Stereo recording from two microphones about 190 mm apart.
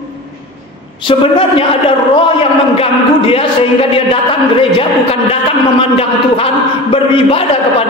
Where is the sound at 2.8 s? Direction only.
30° left (ahead or behind).